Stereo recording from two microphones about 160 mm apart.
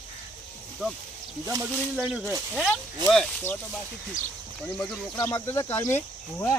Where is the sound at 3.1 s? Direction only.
5° left (ahead or behind).